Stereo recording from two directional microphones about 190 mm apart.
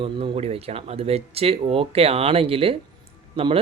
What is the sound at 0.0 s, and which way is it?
Speech, 30° right (ahead or behind).